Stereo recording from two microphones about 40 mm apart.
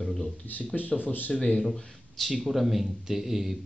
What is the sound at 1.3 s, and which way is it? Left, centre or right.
Speech, left.